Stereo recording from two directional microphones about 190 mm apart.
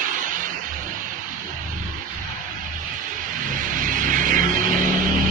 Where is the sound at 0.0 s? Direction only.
45° right (ahead or behind).